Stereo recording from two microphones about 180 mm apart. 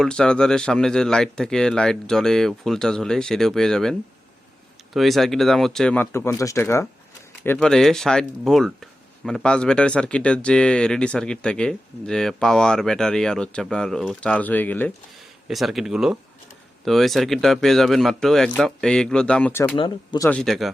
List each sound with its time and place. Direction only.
0.0 s speech: 5° left (ahead or behind)
4.9 s speech: centre (ahead or behind)
15.4 s speech: centre (ahead or behind)
19.7 s speech: 25° left (ahead or behind)
20.2 s speech: 5° left (ahead or behind)